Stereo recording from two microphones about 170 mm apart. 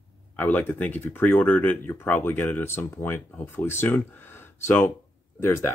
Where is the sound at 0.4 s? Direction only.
10° left (ahead or behind).